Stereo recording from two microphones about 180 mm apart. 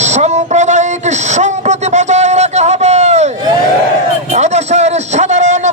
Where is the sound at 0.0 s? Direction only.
40° right (ahead or behind).